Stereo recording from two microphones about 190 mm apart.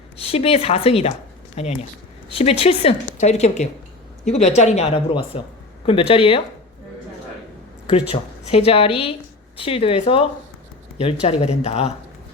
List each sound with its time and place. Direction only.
0.2 s a woman's voice: 30° left (ahead or behind)
7.9 s a woman's voice: 30° left (ahead or behind)